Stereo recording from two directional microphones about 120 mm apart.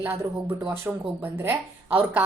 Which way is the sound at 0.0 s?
15° right (ahead or behind).